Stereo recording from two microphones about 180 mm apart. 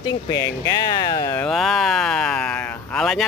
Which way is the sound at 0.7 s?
20° left (ahead or behind).